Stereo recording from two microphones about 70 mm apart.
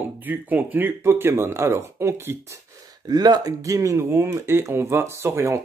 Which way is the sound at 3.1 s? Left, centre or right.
Right.